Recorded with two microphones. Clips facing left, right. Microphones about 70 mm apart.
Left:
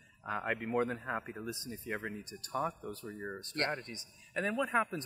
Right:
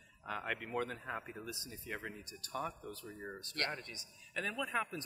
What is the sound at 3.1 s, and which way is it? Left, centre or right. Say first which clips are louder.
Speech: left 4 dB; left.